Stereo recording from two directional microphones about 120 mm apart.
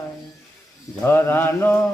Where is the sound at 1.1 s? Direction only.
20° left (ahead or behind).